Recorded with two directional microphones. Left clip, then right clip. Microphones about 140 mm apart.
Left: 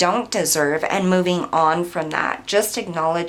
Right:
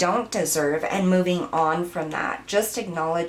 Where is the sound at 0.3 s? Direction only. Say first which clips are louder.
Left 4 dB; 25° left (ahead or behind).